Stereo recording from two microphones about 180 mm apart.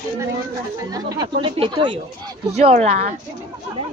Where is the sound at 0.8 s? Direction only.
20° right (ahead or behind); by 3.0 s 35° right (ahead or behind).